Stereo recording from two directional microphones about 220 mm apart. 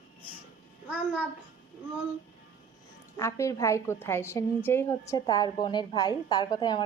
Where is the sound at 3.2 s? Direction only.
15° left (ahead or behind).